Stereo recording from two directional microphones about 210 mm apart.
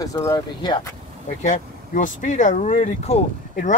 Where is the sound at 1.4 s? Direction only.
35° left (ahead or behind).